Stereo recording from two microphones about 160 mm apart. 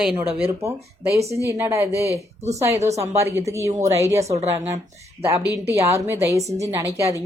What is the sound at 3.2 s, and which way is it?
Speech, 15° right (ahead or behind).